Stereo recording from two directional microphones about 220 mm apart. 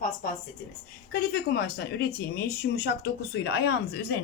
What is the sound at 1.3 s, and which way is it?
Speech, 45° left (ahead or behind).